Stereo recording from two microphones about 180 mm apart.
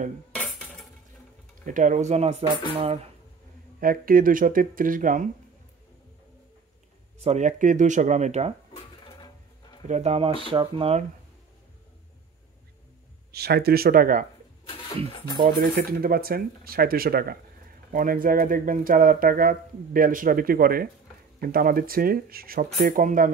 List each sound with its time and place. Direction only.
0.3 s cutlery: 5° left (ahead or behind)
1.7 s speech: 45° right (ahead or behind)
3.8 s speech: 50° right (ahead or behind)
7.2 s speech: 40° right (ahead or behind)
9.8 s speech: 35° right (ahead or behind)
13.3 s speech: 60° right (ahead or behind)
15.4 s speech: 50° right (ahead or behind)